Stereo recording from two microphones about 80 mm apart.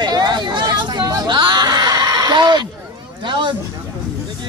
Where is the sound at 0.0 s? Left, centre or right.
Right.